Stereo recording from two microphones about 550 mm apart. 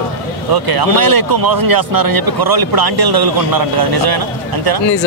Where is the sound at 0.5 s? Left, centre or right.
Right.